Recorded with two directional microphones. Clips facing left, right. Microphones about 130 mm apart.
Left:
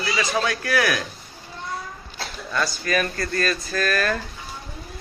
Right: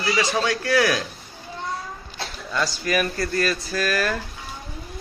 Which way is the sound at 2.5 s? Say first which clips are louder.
Even; 15° right (ahead or behind).